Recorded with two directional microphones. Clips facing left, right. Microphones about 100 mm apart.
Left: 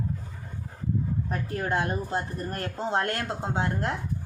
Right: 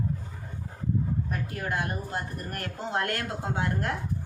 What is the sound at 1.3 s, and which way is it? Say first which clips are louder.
Speech: left 3 dB; 30° left (ahead or behind).